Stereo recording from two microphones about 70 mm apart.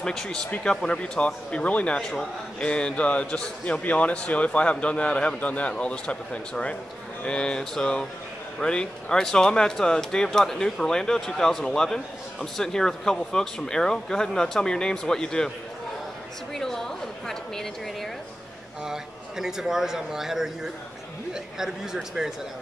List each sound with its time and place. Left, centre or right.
0.0 s a man's voice: centre
16.5 s a man's voice: centre
18.9 s a man's voice: centre